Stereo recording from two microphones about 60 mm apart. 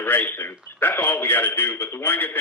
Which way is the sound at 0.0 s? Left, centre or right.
Left.